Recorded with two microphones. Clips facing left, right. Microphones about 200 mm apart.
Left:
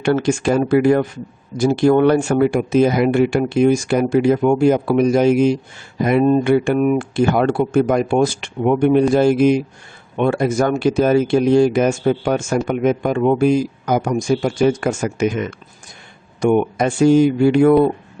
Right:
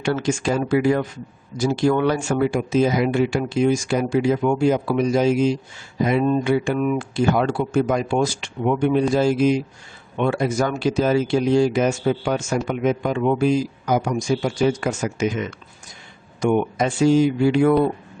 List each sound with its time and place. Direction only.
0.0 s speech: 60° left (ahead or behind)